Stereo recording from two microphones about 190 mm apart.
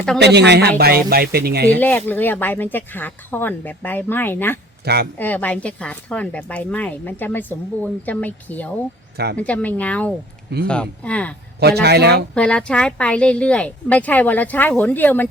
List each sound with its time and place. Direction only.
0.2 s speech: 60° right (ahead or behind)
1.8 s speech: 10° left (ahead or behind)
11.6 s speech: 60° right (ahead or behind)
12.3 s speech: 5° left (ahead or behind)